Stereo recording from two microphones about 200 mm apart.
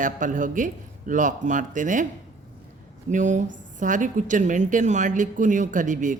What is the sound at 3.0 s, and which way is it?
A woman's voice, 35° right (ahead or behind).